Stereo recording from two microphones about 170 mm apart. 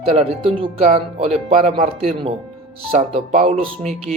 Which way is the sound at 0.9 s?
35° right (ahead or behind).